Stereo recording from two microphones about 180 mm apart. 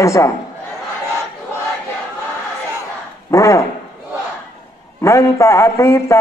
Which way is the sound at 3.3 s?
15° left (ahead or behind).